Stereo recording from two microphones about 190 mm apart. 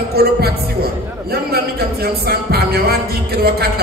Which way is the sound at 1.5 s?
55° right (ahead or behind).